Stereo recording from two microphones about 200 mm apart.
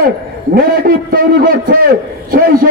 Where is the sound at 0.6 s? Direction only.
45° right (ahead or behind).